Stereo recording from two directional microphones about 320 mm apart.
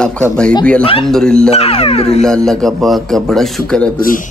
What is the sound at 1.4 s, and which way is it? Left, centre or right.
Speech, centre.